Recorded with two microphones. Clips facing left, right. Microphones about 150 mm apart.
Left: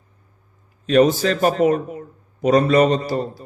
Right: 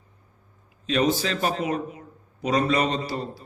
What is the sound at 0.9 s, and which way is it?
Speech, 45° left (ahead or behind).